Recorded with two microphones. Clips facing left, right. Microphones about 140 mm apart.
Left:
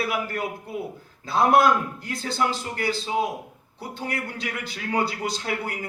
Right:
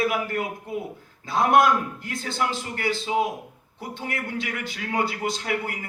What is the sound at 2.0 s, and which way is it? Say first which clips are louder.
Speech: left 1 dB; 35° left (ahead or behind).